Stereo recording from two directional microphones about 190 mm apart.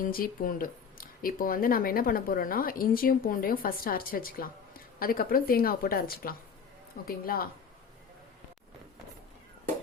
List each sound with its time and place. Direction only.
0.0 s speech: 50° left (ahead or behind)